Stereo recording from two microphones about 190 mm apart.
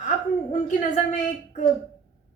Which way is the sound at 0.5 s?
45° left (ahead or behind).